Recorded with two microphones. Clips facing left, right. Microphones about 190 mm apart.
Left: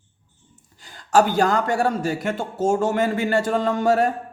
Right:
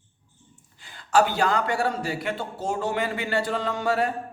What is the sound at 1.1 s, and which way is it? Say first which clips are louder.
A man's voice: left 4 dB; 45° left (ahead or behind).